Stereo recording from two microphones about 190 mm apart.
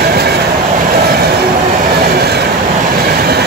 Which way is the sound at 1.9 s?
55° right (ahead or behind).